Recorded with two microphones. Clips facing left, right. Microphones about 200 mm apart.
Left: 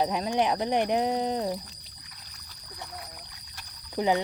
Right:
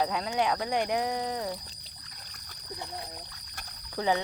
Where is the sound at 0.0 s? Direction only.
20° left (ahead or behind).